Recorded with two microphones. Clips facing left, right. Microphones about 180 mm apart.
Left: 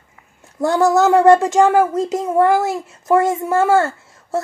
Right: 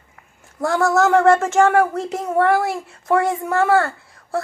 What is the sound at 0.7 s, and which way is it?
Speech, 20° left (ahead or behind).